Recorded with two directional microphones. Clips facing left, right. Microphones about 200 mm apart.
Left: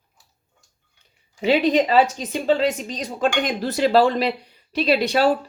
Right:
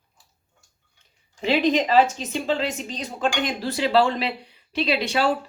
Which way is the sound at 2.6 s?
40° left (ahead or behind).